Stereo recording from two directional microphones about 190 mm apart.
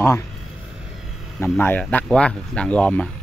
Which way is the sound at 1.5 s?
10° left (ahead or behind).